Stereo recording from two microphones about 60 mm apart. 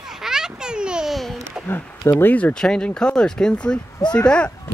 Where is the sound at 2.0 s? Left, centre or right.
Left.